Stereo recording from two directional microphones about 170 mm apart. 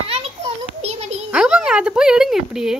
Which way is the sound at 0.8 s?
40° right (ahead or behind).